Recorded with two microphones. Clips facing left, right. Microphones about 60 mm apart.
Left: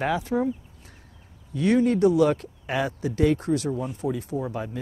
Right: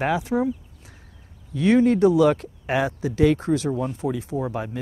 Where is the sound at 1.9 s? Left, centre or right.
Right.